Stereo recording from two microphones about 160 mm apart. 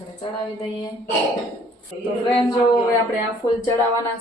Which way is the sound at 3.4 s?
20° left (ahead or behind).